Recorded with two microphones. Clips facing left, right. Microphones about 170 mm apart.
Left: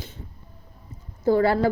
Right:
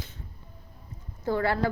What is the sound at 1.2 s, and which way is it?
Speech, 35° left (ahead or behind).